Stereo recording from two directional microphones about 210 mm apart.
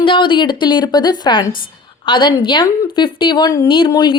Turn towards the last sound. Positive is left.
turn(degrees=20)  # may be behind; listen again after turning